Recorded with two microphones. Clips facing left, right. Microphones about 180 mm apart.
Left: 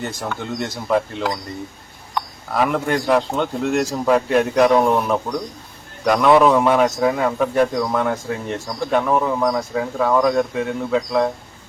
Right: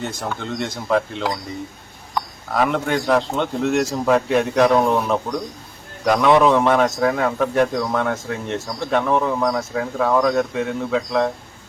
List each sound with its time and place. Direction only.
0.0 s a man's voice: centre (ahead or behind)
2.5 s a man's voice: 5° left (ahead or behind)